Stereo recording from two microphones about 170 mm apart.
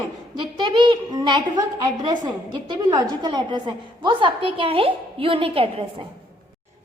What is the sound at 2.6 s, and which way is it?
A woman's voice, 25° right (ahead or behind).